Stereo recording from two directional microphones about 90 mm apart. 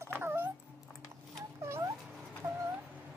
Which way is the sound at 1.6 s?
30° right (ahead or behind).